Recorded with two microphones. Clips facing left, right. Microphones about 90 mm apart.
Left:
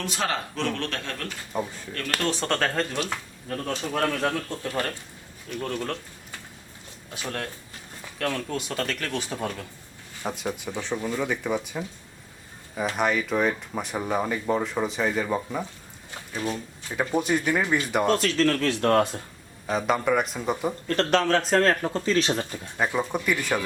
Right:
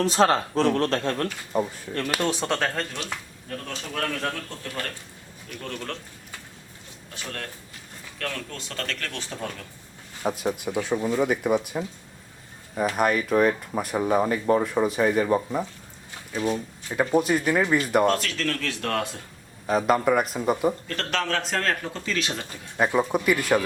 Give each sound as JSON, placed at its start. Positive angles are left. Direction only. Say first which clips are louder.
{"t": 0.0, "sound": "speech", "louder": "right 8 dB", "side_deg": -35}
{"t": 1.5, "sound": "speech", "louder": "right 4 dB", "side_deg": -5}
{"t": 3.5, "sound": "speech", "louder": "left 5 dB", "side_deg": 20}
{"t": 5.6, "sound": "speech", "louder": "left 4 dB", "side_deg": 5}
{"t": 7.1, "sound": "speech", "louder": "left 3 dB", "side_deg": 10}
{"t": 10.2, "sound": "speech", "louder": "right 4 dB", "side_deg": -5}
{"t": 13.0, "sound": "speech", "louder": "right 3 dB", "side_deg": 0}
{"t": 18.1, "sound": "speech", "louder": "left 4 dB", "side_deg": 35}
{"t": 19.6, "sound": "speech", "louder": "right 3 dB", "side_deg": -5}
{"t": 20.8, "sound": "speech", "louder": "left 6 dB", "side_deg": 35}
{"t": 22.8, "sound": "speech", "louder": "right 4 dB", "side_deg": -10}